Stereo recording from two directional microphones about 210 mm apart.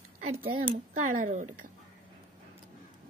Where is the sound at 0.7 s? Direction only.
40° right (ahead or behind).